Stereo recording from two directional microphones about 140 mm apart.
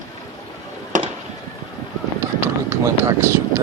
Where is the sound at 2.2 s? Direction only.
20° right (ahead or behind).